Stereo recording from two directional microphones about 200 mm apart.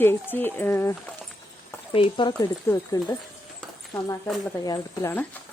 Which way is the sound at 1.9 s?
30° left (ahead or behind).